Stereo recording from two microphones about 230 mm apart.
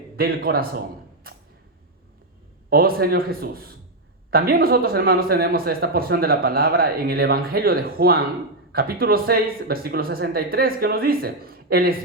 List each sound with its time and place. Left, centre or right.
0.2 s speech: right
1.2 s a sound: right
2.6 s speech: right